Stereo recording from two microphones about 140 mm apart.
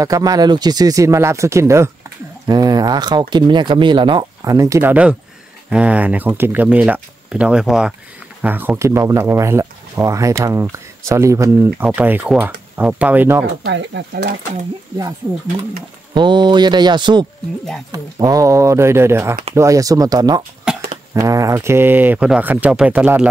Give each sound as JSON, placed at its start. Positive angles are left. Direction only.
{"t": 0.0, "sound": "speech", "side_deg": -25}
{"t": 5.7, "sound": "speech", "side_deg": -10}
{"t": 16.1, "sound": "speech", "side_deg": -35}
{"t": 20.7, "sound": "cough", "side_deg": -5}
{"t": 21.1, "sound": "speech", "side_deg": -25}